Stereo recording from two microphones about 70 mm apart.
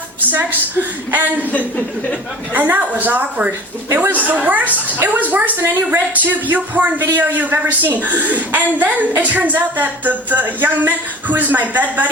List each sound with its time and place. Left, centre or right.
0.3 s a woman's voice: right
1.5 s speech: left
2.5 s a woman's voice: right